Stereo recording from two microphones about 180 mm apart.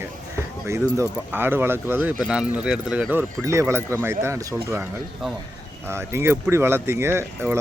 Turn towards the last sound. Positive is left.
turn(degrees=-15)  # may be behind; listen again after turning